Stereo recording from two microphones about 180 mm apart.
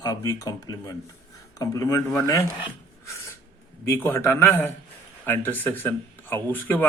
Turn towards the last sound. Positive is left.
turn(degrees=10)  # may be behind; listen again after turning